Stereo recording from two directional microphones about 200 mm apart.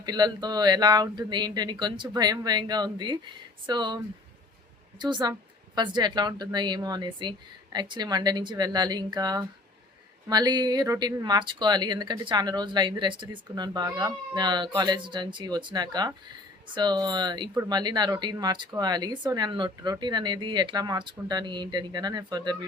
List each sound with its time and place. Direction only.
0.0 s speech: 20° right (ahead or behind)